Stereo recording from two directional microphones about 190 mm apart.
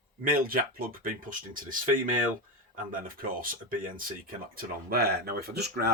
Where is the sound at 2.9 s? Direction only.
45° right (ahead or behind).